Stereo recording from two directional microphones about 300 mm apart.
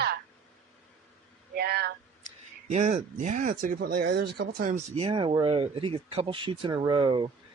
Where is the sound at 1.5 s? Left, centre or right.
Right.